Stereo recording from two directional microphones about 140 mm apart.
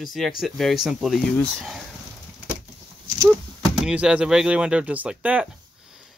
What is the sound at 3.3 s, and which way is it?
Speech, centre (ahead or behind).